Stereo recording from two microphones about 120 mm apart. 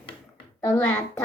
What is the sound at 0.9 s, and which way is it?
Speech, 20° left (ahead or behind).